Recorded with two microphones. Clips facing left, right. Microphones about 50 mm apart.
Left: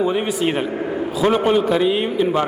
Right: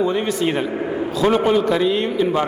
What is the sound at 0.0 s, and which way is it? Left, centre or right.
A man's voice, centre.